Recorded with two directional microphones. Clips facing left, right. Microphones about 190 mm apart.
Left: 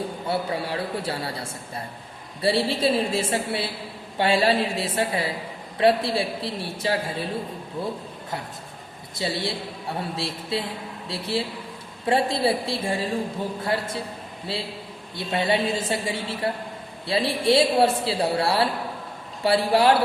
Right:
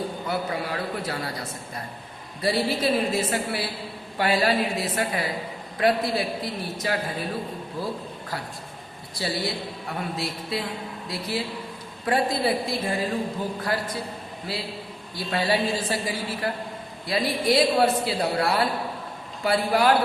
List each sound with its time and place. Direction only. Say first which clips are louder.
0.3 s speech: left 3 dB; 30° left (ahead or behind)
9.1 s speech: left 1 dB; 25° left (ahead or behind)